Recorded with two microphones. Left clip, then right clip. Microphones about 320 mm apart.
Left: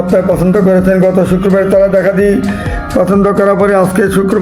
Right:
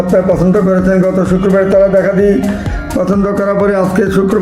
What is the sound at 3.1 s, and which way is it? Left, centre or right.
Speech, left.